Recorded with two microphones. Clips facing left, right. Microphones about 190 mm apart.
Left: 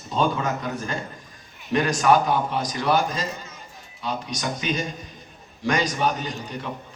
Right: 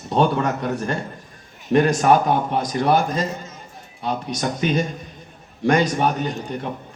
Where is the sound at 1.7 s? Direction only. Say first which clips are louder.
Right 4 dB; 50° right (ahead or behind).